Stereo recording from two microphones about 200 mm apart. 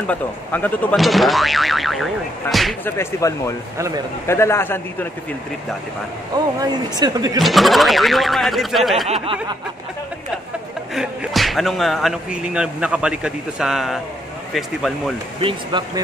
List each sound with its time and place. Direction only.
0.0 s speech: 5° left (ahead or behind)
3.0 s speech: 15° left (ahead or behind)
3.7 s speech: 15° right (ahead or behind)
4.3 s speech: 15° left (ahead or behind)
6.3 s speech: 20° right (ahead or behind)
7.3 s speech: centre (ahead or behind)
9.1 s speech: 25° right (ahead or behind)
11.0 s speech: centre (ahead or behind)
15.4 s speech: 25° right (ahead or behind)